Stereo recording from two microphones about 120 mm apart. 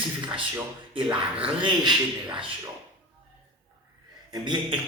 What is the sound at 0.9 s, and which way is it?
Speech, 45° right (ahead or behind).